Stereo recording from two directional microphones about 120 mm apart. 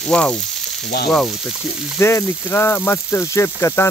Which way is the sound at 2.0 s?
20° left (ahead or behind).